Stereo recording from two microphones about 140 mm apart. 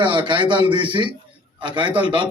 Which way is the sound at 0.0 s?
35° right (ahead or behind).